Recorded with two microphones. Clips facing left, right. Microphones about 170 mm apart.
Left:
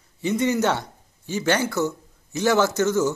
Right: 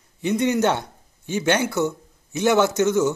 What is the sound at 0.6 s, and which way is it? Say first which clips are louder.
Speech: right 2 dB; 20° right (ahead or behind).